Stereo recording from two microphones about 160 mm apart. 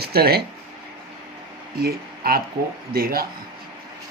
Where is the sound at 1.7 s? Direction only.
70° right (ahead or behind).